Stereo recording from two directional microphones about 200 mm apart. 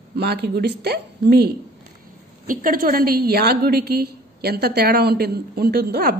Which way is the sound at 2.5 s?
45° right (ahead or behind).